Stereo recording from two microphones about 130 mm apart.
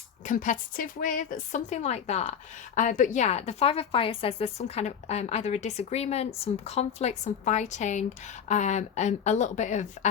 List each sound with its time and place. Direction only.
0.3 s a woman's voice: 85° left; by 2.3 s 55° left (ahead or behind)
2.7 s a woman's voice: 80° left